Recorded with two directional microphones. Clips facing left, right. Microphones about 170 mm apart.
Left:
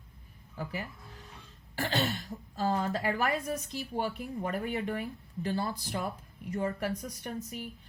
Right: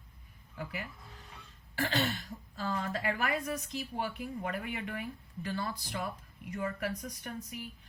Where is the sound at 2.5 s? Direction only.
35° left (ahead or behind).